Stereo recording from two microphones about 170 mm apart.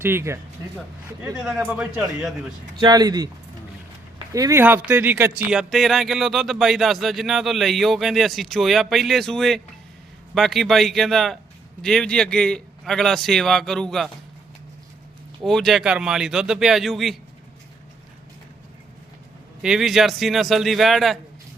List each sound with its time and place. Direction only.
0.0 s a man's voice: 15° right (ahead or behind)
1.4 s a man's voice: 5° right (ahead or behind)
2.7 s speech: 25° right (ahead or behind)
4.3 s speech: 20° right (ahead or behind); by 14.1 s centre (ahead or behind)
15.4 s speech: centre (ahead or behind)
19.6 s speech: centre (ahead or behind)